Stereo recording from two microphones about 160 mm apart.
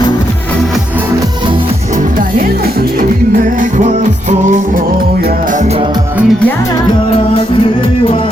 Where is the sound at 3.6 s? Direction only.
50° right (ahead or behind).